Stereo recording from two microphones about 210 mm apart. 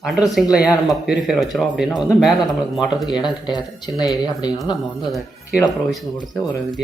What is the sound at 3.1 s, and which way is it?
Speech, 20° left (ahead or behind).